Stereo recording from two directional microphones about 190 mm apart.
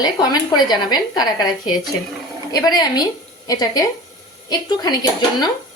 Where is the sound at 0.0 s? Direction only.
20° left (ahead or behind).